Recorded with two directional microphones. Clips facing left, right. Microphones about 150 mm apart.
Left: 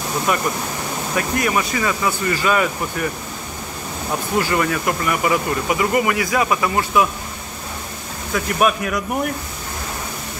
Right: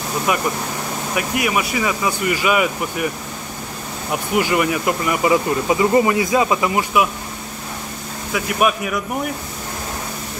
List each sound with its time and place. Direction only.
0.3 s speech: 15° right (ahead or behind)
4.4 s speech: 15° right (ahead or behind)
8.3 s speech: 5° right (ahead or behind)